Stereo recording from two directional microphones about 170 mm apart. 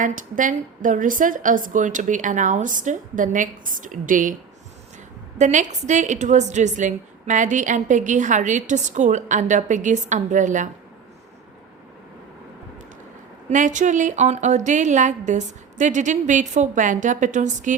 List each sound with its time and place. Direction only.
0.0 s a woman's voice: 50° right (ahead or behind)
5.4 s a woman's voice: 45° right (ahead or behind)
13.5 s a woman's voice: 45° right (ahead or behind)